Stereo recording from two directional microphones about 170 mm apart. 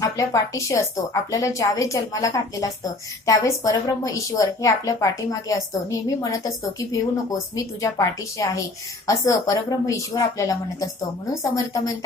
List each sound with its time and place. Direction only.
0.0 s a woman's voice: 20° left (ahead or behind)